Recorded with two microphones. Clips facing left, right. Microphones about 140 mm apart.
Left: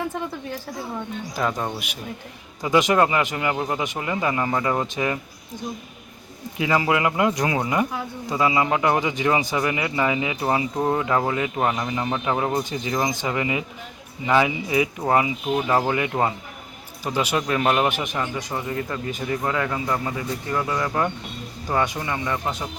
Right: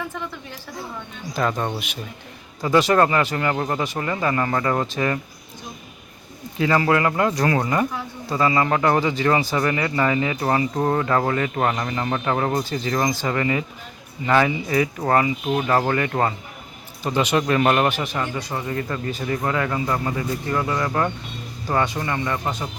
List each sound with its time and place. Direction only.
1.3 s speech: 5° left (ahead or behind)
6.6 s speech: 15° left (ahead or behind)
17.8 s speech: 15° left (ahead or behind)
19.4 s speech: centre (ahead or behind)
20.7 s speech: 5° left (ahead or behind)